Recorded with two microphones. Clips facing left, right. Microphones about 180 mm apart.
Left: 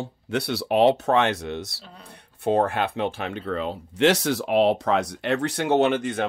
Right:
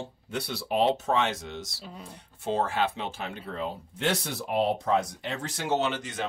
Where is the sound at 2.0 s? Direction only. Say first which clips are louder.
Left 8 dB; 60° left (ahead or behind).